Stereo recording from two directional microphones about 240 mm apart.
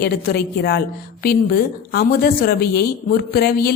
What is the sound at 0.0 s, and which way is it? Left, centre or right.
Speech, left.